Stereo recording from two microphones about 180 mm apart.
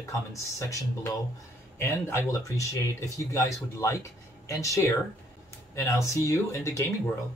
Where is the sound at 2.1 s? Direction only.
15° left (ahead or behind).